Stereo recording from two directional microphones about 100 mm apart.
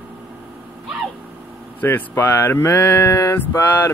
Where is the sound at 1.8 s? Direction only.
20° left (ahead or behind).